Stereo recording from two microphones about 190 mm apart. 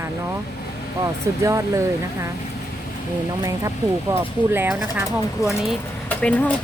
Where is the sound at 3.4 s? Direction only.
15° right (ahead or behind).